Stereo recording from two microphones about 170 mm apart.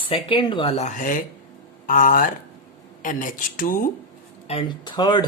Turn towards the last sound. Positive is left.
turn(degrees=25)  # may be behind; listen again after turning